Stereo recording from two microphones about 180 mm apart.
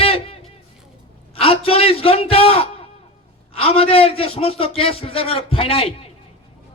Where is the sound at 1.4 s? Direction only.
35° left (ahead or behind).